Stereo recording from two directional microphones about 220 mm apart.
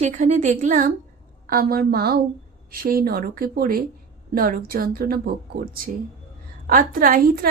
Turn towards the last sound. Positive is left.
turn(degrees=-40)  # may be behind; listen again after turning